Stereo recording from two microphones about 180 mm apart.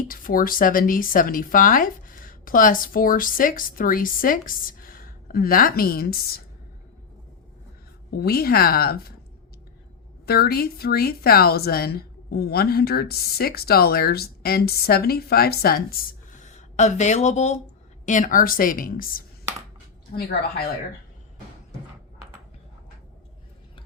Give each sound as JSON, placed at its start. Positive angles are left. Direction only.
{"t": 0.1, "sound": "a woman's voice", "side_deg": 50}
{"t": 8.1, "sound": "a woman's voice", "side_deg": 60}
{"t": 10.2, "sound": "a woman's voice", "side_deg": 60}